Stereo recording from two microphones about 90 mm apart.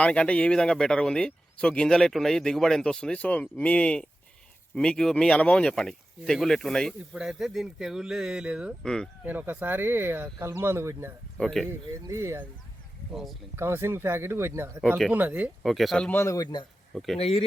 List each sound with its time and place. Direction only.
0.0 s speech: 10° left (ahead or behind)
7.1 s speech: 5° right (ahead or behind)
8.8 s speech: 5° left (ahead or behind)
9.2 s speech: 20° right (ahead or behind)
11.3 s speech: 5° left (ahead or behind)
12.0 s speech: 35° right (ahead or behind)
13.6 s speech: 30° right (ahead or behind)
15.6 s speech: centre (ahead or behind)
16.1 s speech: 35° left (ahead or behind)
16.9 s speech: centre (ahead or behind)
17.2 s speech: 90° left